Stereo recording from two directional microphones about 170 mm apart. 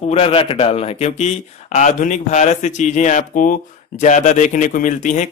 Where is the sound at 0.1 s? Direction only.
35° left (ahead or behind).